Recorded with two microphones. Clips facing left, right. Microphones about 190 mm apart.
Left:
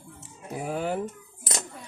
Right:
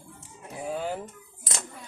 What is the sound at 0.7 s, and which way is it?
Speech, 60° left (ahead or behind).